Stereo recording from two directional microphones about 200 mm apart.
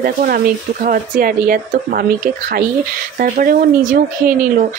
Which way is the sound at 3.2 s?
45° right (ahead or behind).